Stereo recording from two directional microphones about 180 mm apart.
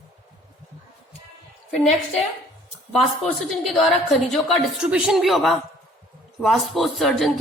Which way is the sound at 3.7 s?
Centre (ahead or behind).